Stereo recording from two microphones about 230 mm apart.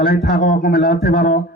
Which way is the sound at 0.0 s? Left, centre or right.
Left.